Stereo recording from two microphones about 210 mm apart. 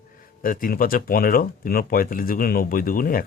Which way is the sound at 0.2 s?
40° left (ahead or behind).